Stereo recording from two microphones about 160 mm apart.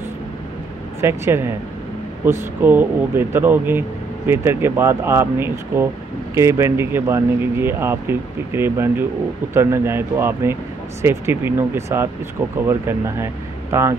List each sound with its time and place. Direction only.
1.0 s speech: 15° right (ahead or behind)